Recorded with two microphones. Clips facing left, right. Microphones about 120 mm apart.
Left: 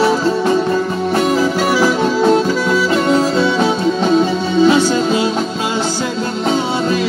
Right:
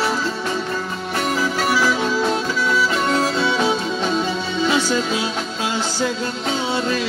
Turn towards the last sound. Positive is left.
turn(degrees=45)  # may be behind; listen again after turning